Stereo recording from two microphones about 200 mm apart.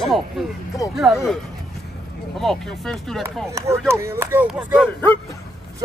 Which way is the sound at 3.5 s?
15° right (ahead or behind).